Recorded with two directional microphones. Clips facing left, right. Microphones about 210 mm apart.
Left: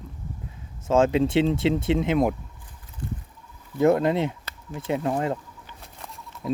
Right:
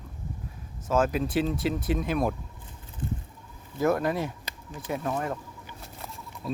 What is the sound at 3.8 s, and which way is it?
Speech, 25° left (ahead or behind).